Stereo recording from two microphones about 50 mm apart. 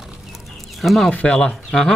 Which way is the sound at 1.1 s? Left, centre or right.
Left.